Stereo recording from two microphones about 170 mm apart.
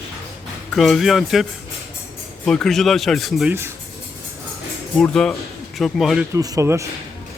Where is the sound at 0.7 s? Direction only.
Centre (ahead or behind).